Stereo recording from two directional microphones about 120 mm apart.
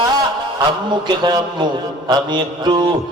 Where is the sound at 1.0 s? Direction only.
35° right (ahead or behind).